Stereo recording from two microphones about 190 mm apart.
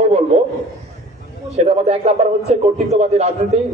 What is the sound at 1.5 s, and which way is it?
A man's voice, 35° right (ahead or behind).